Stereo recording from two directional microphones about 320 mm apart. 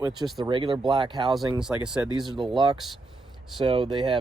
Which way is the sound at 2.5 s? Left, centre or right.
Centre.